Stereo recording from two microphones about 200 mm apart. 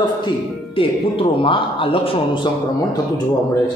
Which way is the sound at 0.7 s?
25° left (ahead or behind).